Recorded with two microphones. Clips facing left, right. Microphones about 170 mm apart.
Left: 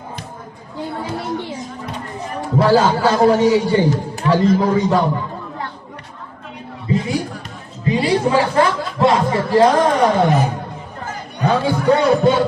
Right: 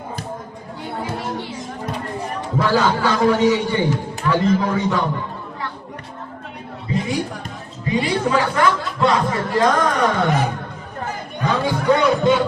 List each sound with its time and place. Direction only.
2.6 s a man's voice: 35° left (ahead or behind)
7.9 s speech: 30° left (ahead or behind)
11.4 s a man's voice: 30° left (ahead or behind)